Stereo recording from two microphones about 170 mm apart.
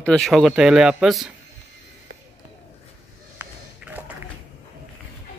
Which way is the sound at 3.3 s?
10° right (ahead or behind).